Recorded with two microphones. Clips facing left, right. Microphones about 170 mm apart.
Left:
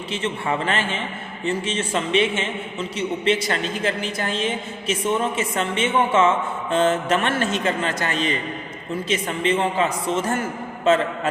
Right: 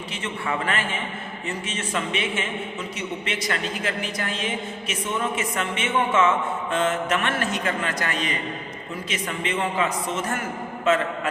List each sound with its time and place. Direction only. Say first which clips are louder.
0.1 s a man's voice: left 5 dB; 25° left (ahead or behind)